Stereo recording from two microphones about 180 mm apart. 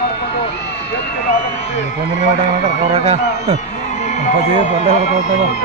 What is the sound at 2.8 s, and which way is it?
Speech, 40° right (ahead or behind).